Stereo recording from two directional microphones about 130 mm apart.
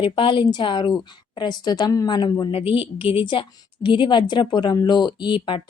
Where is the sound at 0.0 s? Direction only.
40° left (ahead or behind).